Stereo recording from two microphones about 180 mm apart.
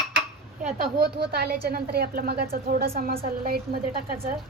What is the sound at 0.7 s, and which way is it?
A woman's voice, 60° right (ahead or behind).